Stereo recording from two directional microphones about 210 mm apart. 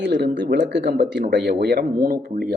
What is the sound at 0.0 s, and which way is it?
Speech, 55° right (ahead or behind).